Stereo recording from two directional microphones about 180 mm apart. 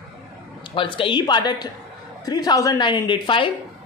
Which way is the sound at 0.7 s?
30° left (ahead or behind).